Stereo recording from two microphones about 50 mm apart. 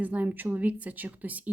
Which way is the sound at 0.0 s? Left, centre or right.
Right.